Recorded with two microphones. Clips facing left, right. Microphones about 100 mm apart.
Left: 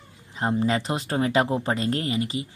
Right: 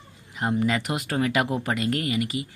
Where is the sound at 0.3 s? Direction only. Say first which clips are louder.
Left 1 dB; 30° left (ahead or behind).